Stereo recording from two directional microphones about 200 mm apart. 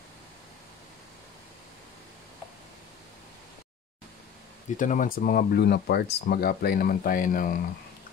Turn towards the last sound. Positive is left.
turn(degrees=45)  # may be behind; listen again after turning